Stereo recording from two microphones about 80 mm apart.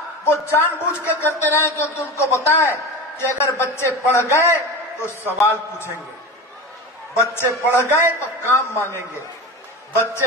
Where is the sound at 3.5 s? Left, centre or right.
Left.